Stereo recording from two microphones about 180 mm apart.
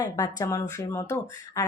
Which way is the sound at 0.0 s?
20° left (ahead or behind).